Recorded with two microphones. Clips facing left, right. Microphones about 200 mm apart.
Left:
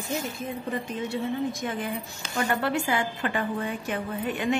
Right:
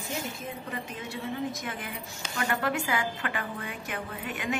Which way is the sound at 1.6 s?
30° left (ahead or behind).